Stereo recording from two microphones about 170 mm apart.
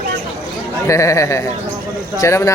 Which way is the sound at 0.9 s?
20° left (ahead or behind).